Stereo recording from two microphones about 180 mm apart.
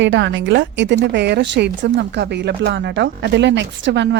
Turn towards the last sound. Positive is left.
turn(degrees=-80)